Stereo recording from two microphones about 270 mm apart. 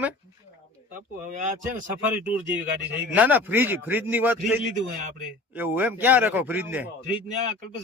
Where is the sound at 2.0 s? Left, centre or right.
Centre.